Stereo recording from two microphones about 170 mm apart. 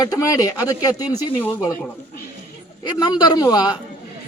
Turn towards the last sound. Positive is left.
turn(degrees=25)  # may be behind; listen again after turning